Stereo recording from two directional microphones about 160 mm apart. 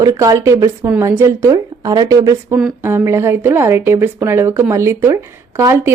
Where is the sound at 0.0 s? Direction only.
25° right (ahead or behind).